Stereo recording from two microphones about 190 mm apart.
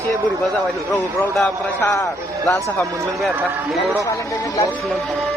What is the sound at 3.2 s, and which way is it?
Speech, 5° right (ahead or behind).